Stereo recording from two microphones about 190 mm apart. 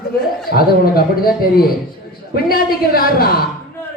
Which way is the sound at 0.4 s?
50° left (ahead or behind).